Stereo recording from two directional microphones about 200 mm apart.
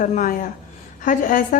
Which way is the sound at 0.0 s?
40° left (ahead or behind).